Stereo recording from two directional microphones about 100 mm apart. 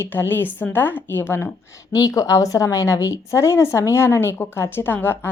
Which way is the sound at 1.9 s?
35° left (ahead or behind).